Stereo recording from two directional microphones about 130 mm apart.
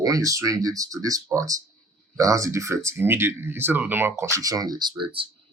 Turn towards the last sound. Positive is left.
turn(degrees=-40)  # may be behind; listen again after turning